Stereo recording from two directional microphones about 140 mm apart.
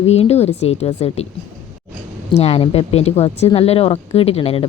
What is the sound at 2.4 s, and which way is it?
Speech, 50° left (ahead or behind).